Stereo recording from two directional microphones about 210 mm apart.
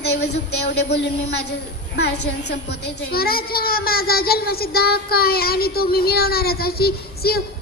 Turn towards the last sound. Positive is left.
turn(degrees=50)  # may be behind; listen again after turning